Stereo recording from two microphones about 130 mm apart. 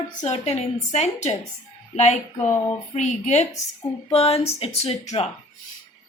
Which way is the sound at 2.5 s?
20° left (ahead or behind).